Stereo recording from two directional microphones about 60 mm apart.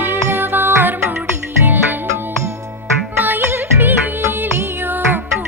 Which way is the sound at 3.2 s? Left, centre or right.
Right.